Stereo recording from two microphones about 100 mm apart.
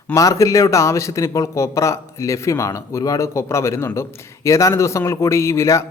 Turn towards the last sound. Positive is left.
turn(degrees=30)  # may be behind; listen again after turning